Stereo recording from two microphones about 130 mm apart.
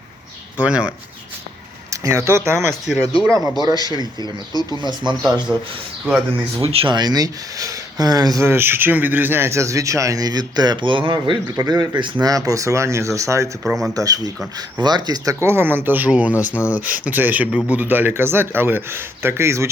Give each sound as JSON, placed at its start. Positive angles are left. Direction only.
{"t": 0.6, "sound": "speech", "side_deg": -10}
{"t": 1.9, "sound": "speech", "side_deg": -25}
{"t": 2.9, "sound": "speech", "side_deg": 0}
{"t": 3.6, "sound": "speech", "side_deg": -30}
{"t": 4.2, "sound": "speech", "side_deg": 30}
{"t": 5.5, "sound": "speech", "side_deg": -10}
{"t": 6.6, "sound": "speech", "side_deg": -45}
{"t": 6.9, "sound": "speech", "side_deg": -30}
{"t": 11.5, "sound": "speech", "side_deg": -25}
{"t": 13.7, "sound": "speech", "side_deg": -5}
{"t": 13.9, "sound": "speech", "side_deg": -25}